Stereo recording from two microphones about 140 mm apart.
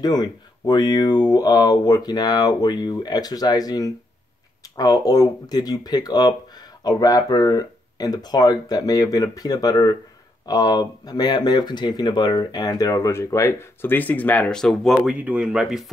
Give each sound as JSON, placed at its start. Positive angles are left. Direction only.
{"t": 0.0, "sound": "speech", "side_deg": 30}
{"t": 15.1, "sound": "speech", "side_deg": -10}